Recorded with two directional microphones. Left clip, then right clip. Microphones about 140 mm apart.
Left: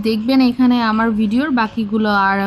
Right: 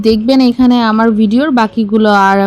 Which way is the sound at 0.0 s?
40° right (ahead or behind).